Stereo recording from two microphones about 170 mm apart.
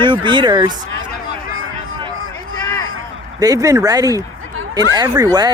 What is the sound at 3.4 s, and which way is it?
Speech, 20° right (ahead or behind).